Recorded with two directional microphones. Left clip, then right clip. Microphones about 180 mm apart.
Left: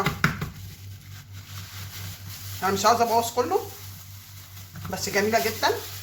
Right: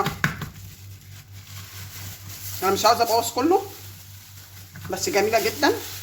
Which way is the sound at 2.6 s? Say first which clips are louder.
Right 2 dB; 50° right (ahead or behind).